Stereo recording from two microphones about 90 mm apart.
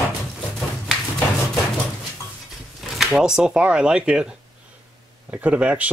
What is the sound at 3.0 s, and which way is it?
A man's voice, 5° right (ahead or behind).